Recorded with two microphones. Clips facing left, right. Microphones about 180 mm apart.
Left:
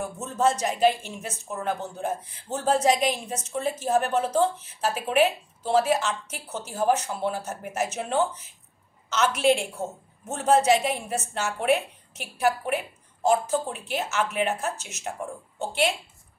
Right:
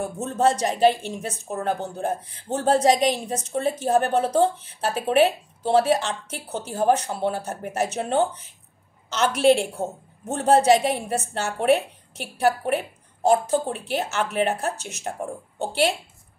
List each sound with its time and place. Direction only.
0.0 s a woman's voice: 35° right (ahead or behind)